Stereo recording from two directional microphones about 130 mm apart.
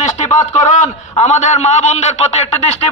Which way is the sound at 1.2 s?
60° left (ahead or behind).